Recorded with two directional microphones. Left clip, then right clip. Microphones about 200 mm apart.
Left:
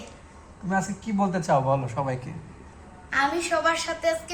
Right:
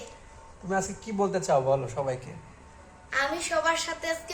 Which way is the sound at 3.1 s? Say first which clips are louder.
Left 4 dB; 20° right (ahead or behind).